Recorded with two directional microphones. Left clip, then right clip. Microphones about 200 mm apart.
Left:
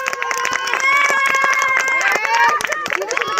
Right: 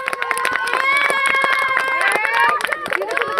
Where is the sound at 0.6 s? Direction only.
50° right (ahead or behind).